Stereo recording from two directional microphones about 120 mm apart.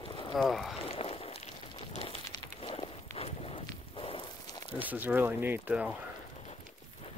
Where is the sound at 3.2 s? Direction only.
60° left (ahead or behind).